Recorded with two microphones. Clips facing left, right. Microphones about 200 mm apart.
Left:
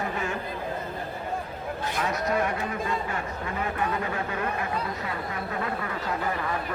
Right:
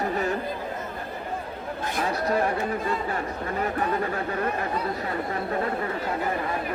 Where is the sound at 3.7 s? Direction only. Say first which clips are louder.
Right 2 dB; 40° right (ahead or behind).